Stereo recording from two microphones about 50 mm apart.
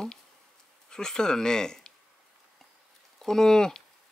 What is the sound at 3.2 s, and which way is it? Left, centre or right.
Speech, centre.